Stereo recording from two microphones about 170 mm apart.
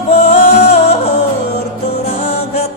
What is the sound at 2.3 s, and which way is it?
Music, 40° left (ahead or behind).